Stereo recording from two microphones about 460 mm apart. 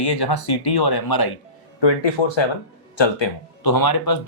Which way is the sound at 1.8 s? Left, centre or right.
Left.